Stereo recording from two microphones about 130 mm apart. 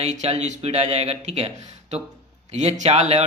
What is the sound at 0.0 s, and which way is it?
Speech, 55° right (ahead or behind).